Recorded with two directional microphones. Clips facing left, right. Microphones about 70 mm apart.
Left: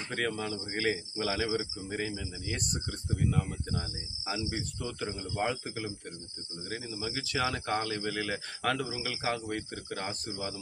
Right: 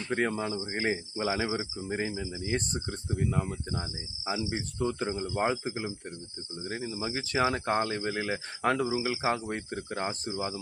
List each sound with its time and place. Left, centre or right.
0.1 s speech: right